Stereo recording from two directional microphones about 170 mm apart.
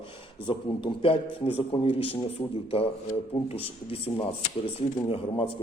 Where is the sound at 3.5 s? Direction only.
35° left (ahead or behind).